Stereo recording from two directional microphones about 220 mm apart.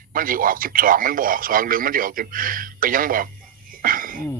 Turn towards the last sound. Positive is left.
turn(degrees=-40)  # may be behind; listen again after turning